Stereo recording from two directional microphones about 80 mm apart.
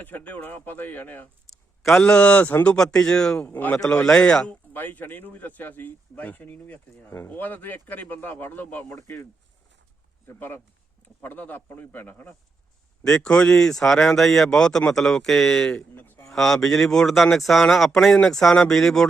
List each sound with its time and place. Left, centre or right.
0.0 s speech: left
1.5 s a sound: centre
2.0 s speech: centre
2.7 s speech: centre
3.4 s speech: left
3.8 s speech: centre
4.7 s speech: left
10.2 s speech: left
13.1 s speech: centre
16.0 s a sound: left
16.3 s speech: centre